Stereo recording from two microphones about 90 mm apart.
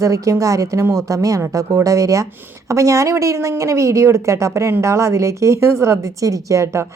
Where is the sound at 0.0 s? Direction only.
35° right (ahead or behind).